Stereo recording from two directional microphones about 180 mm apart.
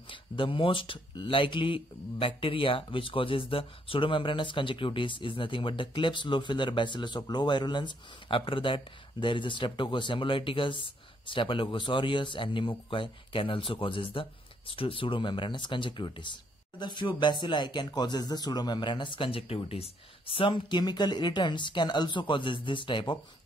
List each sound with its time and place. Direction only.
0.1 s speech: 30° left (ahead or behind)